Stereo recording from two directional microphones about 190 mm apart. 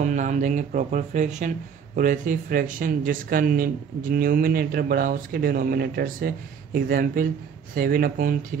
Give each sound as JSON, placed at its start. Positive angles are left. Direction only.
{"t": 0.0, "sound": "speech", "side_deg": -40}